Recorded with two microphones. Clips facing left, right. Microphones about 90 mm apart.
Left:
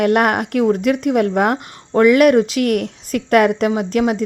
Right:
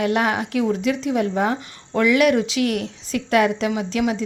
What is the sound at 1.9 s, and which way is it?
A woman's voice, 45° left (ahead or behind).